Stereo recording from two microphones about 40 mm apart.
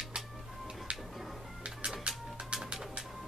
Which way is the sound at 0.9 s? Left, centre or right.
Right.